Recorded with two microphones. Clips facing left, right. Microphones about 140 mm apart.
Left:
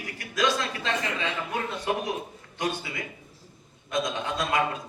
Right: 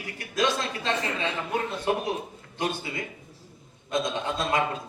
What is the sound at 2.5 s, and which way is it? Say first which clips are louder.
A man's voice: right 1 dB; 30° right (ahead or behind).